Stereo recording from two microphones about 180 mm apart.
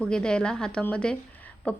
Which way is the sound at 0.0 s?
5° left (ahead or behind).